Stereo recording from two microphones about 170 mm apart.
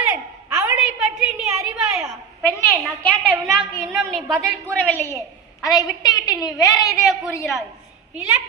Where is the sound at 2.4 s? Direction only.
15° left (ahead or behind).